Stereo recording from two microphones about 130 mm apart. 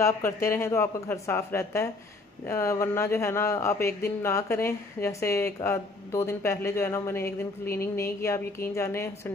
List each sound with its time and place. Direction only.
0.0 s speech: 20° left (ahead or behind)